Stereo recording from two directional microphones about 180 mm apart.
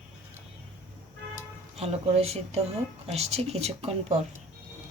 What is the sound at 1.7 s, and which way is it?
Speech, 35° right (ahead or behind).